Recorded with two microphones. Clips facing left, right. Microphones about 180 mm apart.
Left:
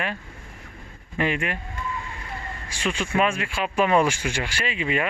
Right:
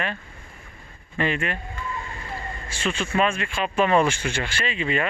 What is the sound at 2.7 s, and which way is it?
Speech, 10° left (ahead or behind).